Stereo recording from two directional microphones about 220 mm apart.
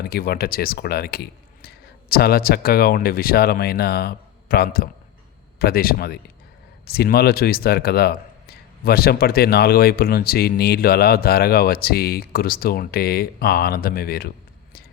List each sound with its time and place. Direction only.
0.0 s a man's voice: 45° left (ahead or behind)